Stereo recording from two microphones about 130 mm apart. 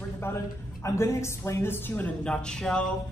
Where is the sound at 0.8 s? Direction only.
25° left (ahead or behind).